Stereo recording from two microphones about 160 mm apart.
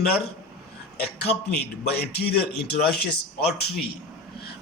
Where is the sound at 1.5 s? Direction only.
90° left.